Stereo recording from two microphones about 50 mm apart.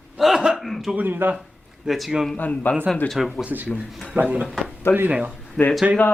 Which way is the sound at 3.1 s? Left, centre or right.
Centre.